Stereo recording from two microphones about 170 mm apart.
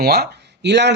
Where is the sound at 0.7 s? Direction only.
90° right.